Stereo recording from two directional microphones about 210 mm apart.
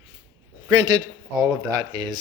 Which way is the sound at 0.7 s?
20° right (ahead or behind).